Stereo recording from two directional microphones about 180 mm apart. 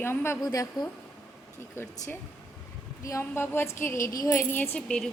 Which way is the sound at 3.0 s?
15° left (ahead or behind).